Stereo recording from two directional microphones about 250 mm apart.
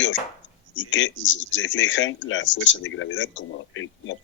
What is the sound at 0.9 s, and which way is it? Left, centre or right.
Speech, left.